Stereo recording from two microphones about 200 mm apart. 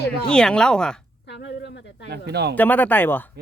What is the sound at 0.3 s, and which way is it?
Speech, 5° left (ahead or behind).